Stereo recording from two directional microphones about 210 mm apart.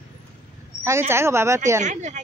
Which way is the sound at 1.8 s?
35° right (ahead or behind).